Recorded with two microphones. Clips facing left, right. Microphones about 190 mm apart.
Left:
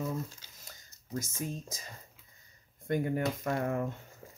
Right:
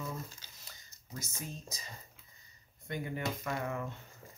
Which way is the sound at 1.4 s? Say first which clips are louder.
Left 7 dB; 50° left (ahead or behind).